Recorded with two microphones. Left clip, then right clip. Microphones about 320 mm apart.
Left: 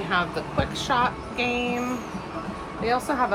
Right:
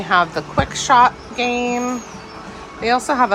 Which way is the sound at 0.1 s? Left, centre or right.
Right.